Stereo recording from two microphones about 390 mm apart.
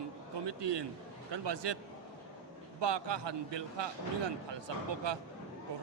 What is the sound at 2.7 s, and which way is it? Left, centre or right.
A man's voice, right.